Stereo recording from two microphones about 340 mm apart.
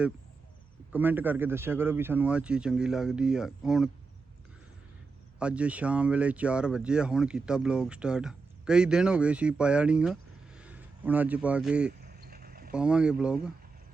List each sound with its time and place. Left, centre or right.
0.9 s speech: centre
5.4 s speech: centre
11.9 s a sound: right
12.7 s speech: centre